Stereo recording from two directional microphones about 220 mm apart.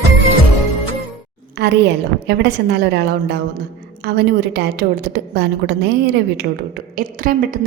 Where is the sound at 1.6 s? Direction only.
50° right (ahead or behind).